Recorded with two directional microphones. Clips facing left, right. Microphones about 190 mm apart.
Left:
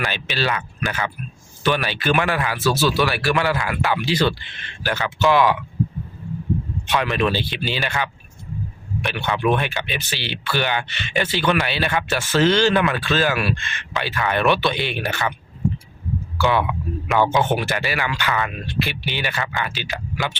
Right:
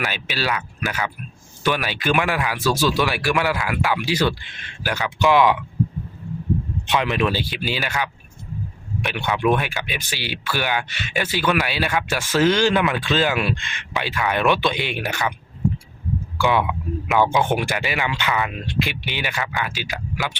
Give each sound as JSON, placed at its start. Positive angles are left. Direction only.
{"t": 0.0, "sound": "speech", "side_deg": -10}
{"t": 6.8, "sound": "speech", "side_deg": -20}
{"t": 16.4, "sound": "speech", "side_deg": -15}
{"t": 19.4, "sound": "speech", "side_deg": 0}